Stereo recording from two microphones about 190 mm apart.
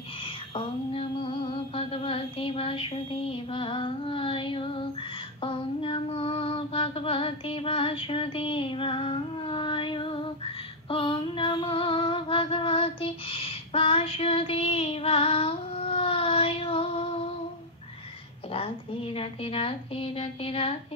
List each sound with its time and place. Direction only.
0.6 s female singing: 25° left (ahead or behind)
18.5 s speech: 30° left (ahead or behind)